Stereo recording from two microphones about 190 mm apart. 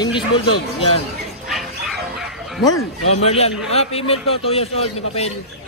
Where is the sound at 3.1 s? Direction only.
30° left (ahead or behind).